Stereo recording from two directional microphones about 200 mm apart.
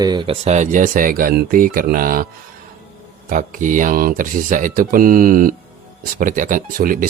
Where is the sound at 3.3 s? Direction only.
40° right (ahead or behind).